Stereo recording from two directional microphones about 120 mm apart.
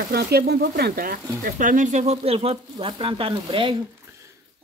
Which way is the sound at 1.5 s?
90° right.